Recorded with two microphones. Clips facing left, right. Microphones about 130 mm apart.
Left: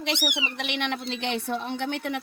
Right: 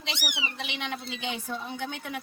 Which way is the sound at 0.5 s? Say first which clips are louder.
Left 5 dB; 70° left (ahead or behind).